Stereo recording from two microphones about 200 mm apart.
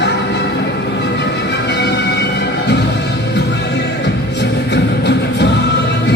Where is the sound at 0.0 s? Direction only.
60° left (ahead or behind).